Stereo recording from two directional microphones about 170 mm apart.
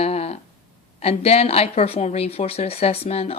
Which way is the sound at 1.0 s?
35° left (ahead or behind).